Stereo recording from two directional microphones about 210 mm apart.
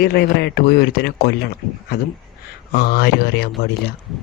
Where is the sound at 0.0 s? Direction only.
50° left (ahead or behind).